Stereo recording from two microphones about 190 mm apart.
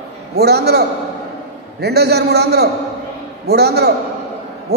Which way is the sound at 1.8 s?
60° right (ahead or behind).